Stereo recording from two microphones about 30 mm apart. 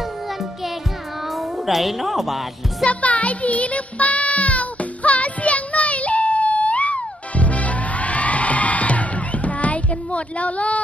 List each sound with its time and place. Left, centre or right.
1.3 s a woman's voice: centre
2.8 s music: left